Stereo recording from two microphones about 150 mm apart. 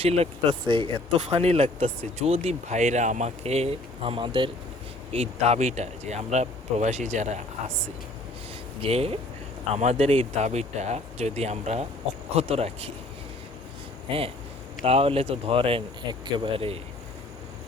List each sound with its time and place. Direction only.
0.0 s speech: 45° right (ahead or behind)
8.8 s speech: 40° right (ahead or behind)
14.1 s speech: 35° right (ahead or behind)